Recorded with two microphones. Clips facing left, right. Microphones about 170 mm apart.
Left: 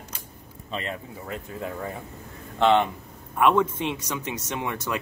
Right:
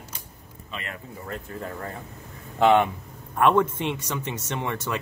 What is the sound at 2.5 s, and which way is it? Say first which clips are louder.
Speech: right 1 dB; 10° right (ahead or behind).